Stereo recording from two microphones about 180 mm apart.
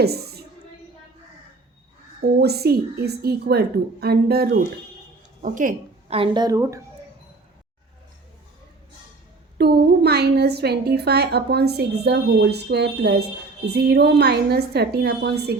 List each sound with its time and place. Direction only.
0.0 s a woman's voice: 60° right (ahead or behind)
2.4 s a woman's voice: 60° right (ahead or behind)
5.4 s a woman's voice: 45° right (ahead or behind)
6.1 s speech: 25° right (ahead or behind)
9.6 s a woman's voice: 65° right (ahead or behind)